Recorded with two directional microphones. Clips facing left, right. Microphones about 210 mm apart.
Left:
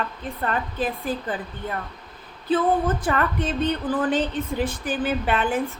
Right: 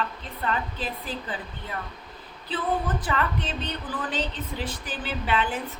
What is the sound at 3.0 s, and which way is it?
A woman's voice, 50° left (ahead or behind).